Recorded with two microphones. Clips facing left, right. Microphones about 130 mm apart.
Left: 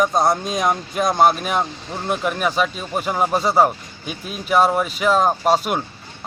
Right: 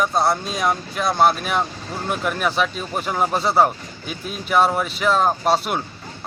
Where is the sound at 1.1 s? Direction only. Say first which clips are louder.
Left 1 dB; centre (ahead or behind).